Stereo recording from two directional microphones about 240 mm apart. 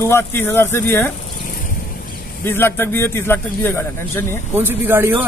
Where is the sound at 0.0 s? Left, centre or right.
Centre.